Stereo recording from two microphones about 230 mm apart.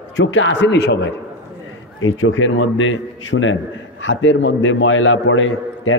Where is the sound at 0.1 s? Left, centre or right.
Left.